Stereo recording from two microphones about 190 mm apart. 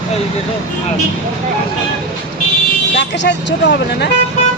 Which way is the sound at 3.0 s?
70° left (ahead or behind).